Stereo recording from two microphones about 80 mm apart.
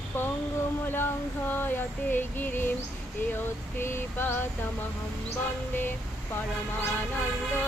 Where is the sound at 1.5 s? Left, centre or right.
Left.